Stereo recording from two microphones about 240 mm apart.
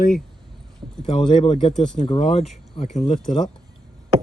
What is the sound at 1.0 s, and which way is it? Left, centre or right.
Speech, centre.